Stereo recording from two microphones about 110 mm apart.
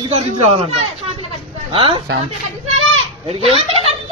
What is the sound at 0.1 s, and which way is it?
Speech, 70° right (ahead or behind).